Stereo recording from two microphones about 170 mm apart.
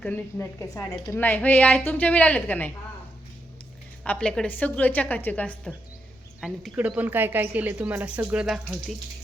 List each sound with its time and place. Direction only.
0.0 s a woman's voice: 10° left (ahead or behind)
4.0 s a woman's voice: 5° left (ahead or behind)